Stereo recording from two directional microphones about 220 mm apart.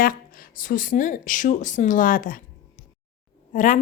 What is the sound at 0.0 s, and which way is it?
A woman's voice, 40° left (ahead or behind).